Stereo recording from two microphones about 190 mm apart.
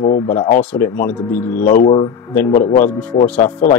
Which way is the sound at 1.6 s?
45° left (ahead or behind).